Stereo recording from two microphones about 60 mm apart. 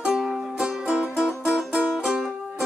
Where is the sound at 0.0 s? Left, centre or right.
Centre.